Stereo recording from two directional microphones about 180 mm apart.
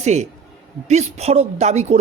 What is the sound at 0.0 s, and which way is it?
A man's voice, 40° right (ahead or behind).